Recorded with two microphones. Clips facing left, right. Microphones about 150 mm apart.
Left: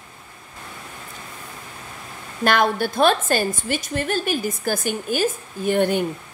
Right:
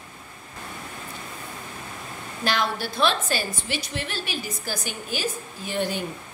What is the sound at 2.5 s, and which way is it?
A woman's voice, 50° left (ahead or behind).